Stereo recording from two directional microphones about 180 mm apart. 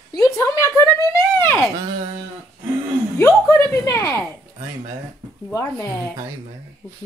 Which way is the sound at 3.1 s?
15° left (ahead or behind).